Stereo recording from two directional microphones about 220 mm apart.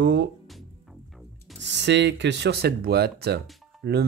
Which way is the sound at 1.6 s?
55° right (ahead or behind).